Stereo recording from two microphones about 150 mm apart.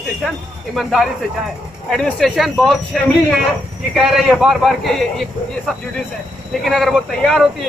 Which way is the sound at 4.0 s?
Centre (ahead or behind).